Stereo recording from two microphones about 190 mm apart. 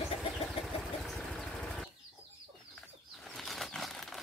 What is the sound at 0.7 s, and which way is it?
Vehicle, centre (ahead or behind).